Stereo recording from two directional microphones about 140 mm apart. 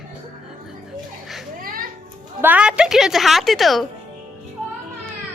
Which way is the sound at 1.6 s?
90° right.